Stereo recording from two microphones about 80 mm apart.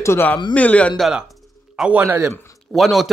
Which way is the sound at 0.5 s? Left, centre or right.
Centre.